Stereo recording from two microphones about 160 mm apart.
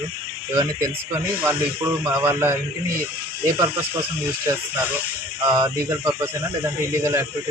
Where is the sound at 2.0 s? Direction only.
15° right (ahead or behind).